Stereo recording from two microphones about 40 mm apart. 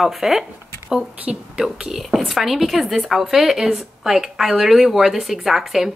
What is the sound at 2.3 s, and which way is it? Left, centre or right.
A woman's voice, centre.